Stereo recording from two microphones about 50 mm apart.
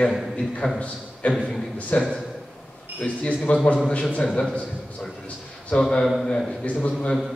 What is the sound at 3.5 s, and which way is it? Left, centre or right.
Speech, left.